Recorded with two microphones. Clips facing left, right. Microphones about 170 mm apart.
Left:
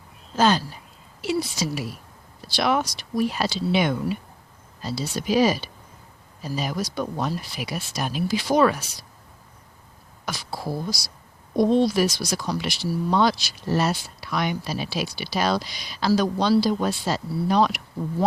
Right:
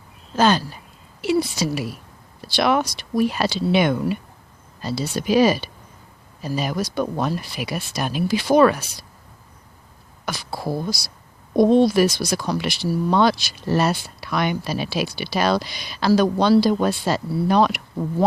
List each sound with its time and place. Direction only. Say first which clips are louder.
0.3 s a woman's voice: right 2 dB; 65° right (ahead or behind)
10.2 s speech: right 3 dB; 60° right (ahead or behind)